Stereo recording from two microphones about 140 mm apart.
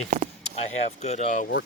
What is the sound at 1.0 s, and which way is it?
Speech, 55° left (ahead or behind).